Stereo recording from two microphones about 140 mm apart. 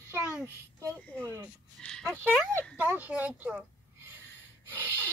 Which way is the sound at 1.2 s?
20° right (ahead or behind).